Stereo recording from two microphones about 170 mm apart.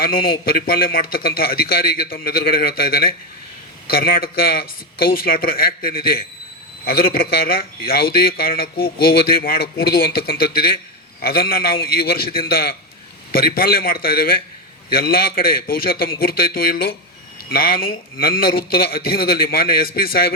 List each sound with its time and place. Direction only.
0.0 s speech: 60° left (ahead or behind)